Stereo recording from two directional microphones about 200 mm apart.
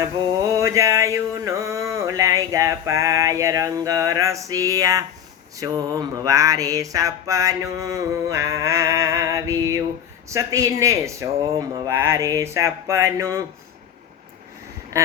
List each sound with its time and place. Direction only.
0.0 s mantra: 15° right (ahead or behind)
14.9 s mantra: 15° right (ahead or behind)